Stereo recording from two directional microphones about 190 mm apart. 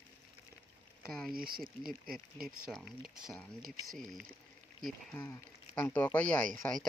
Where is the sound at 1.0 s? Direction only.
Centre (ahead or behind).